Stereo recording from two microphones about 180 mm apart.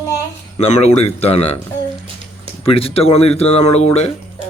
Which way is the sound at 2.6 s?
30° left (ahead or behind).